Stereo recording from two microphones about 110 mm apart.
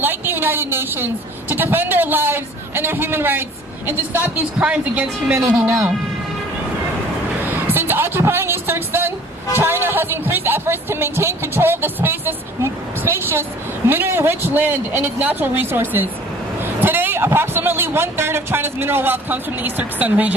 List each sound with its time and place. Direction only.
0.0 s a woman's voice: 20° right (ahead or behind)
5.6 s speech: 30° right (ahead or behind)
7.7 s a sound: 20° right (ahead or behind)
9.6 s speech: 20° right (ahead or behind)